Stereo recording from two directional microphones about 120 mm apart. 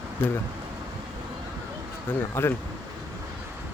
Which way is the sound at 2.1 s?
20° left (ahead or behind).